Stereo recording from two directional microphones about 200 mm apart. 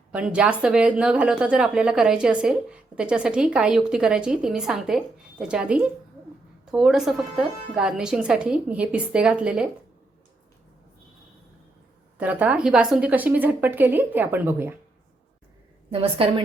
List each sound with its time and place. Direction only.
0.1 s a woman's voice: 5° right (ahead or behind)
12.1 s a woman's voice: 10° right (ahead or behind)
15.9 s a woman's voice: 30° right (ahead or behind)